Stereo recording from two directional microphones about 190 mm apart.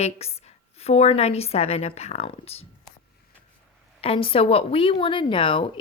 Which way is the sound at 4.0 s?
30° left (ahead or behind).